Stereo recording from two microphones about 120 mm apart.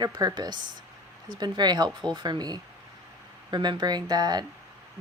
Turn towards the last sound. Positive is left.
turn(degrees=-35)  # may be behind; listen again after turning